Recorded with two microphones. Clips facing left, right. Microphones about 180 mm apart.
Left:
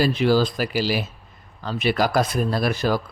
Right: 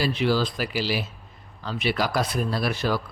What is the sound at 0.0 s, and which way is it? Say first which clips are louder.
Speech: left 5 dB; 45° left (ahead or behind).